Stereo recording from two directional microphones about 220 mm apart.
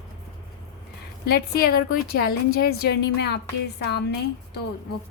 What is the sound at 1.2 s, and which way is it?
A woman's voice, 45° left (ahead or behind).